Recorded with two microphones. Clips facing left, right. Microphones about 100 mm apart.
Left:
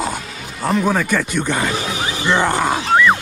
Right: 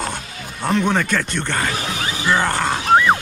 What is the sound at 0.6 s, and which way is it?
Speech, 5° left (ahead or behind).